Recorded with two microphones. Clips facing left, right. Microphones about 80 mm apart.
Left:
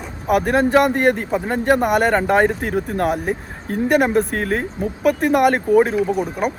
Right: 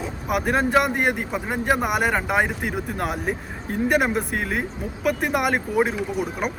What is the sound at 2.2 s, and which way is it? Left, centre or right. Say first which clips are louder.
Speech: left 6 dB; left.